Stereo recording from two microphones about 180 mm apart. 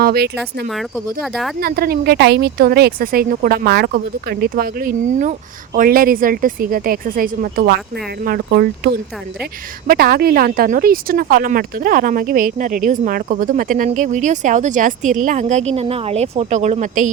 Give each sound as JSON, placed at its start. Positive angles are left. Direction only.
{"t": 0.0, "sound": "speech", "side_deg": -60}
{"t": 0.7, "sound": "speech", "side_deg": 0}
{"t": 1.6, "sound": "a woman's voice", "side_deg": -55}